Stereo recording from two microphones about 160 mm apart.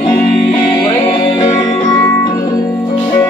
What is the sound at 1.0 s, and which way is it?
Music, 25° left (ahead or behind).